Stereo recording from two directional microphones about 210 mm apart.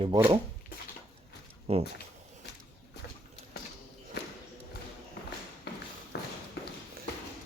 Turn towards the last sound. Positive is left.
turn(degrees=50)  # may be behind; listen again after turning